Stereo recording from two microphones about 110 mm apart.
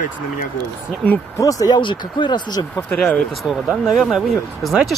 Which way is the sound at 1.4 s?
30° left (ahead or behind).